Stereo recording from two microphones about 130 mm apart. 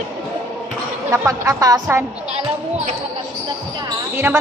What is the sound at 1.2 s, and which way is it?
Speech, 25° right (ahead or behind).